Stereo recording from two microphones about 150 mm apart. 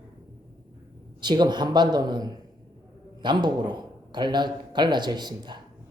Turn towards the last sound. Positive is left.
turn(degrees=-30)  # may be behind; listen again after turning